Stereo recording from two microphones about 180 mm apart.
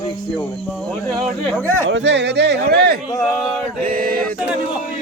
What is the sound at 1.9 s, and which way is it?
Speech, 80° right.